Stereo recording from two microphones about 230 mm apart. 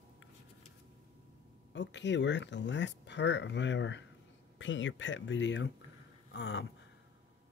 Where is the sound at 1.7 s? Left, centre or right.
Left.